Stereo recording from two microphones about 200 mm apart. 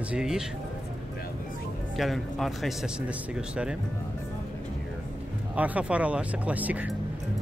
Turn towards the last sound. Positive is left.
turn(degrees=-10)  # may be behind; listen again after turning